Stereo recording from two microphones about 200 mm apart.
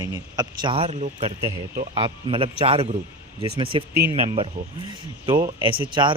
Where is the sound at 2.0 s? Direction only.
25° right (ahead or behind).